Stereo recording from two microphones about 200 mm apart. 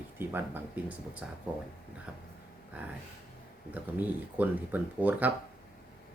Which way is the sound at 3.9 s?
10° right (ahead or behind).